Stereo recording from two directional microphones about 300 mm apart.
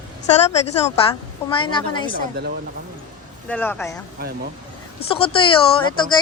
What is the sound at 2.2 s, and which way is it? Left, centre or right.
Speech, right.